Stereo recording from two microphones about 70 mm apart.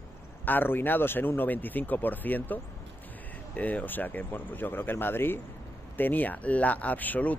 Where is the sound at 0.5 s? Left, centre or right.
Left.